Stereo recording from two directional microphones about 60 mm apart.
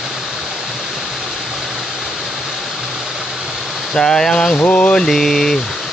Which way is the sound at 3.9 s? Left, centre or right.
Centre.